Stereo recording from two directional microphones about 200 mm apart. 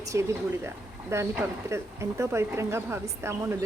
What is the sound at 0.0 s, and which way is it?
Speech, 15° right (ahead or behind).